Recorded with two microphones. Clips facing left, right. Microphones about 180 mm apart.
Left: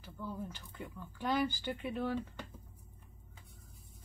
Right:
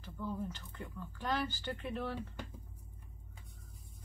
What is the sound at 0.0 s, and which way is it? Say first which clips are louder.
Speech: right 2 dB; 10° left (ahead or behind).